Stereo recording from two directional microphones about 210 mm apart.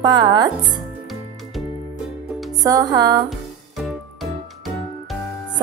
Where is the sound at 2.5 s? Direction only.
15° right (ahead or behind).